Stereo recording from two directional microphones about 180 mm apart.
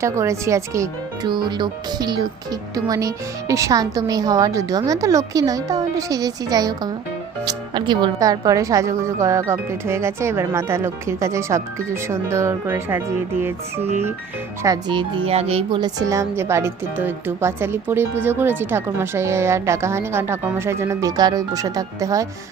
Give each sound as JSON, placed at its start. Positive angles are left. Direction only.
{"t": 0.0, "sound": "speech", "side_deg": -15}
{"t": 14.6, "sound": "speech", "side_deg": -20}